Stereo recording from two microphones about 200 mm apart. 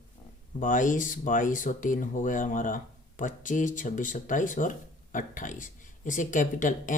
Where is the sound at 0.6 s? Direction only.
40° left (ahead or behind).